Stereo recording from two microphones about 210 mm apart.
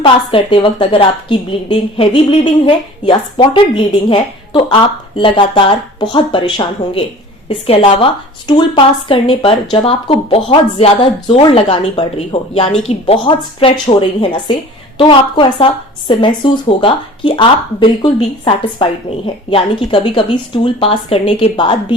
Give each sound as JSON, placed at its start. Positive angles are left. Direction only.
{"t": 0.0, "sound": "a woman's voice", "side_deg": 25}